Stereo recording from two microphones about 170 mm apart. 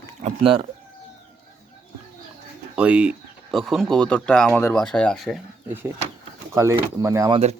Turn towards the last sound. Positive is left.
turn(degrees=-20)  # may be behind; listen again after turning